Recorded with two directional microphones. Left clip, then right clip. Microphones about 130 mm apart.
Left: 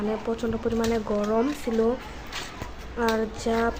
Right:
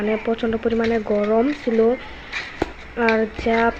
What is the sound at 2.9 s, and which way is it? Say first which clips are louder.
Speech: right 6 dB; 15° right (ahead or behind).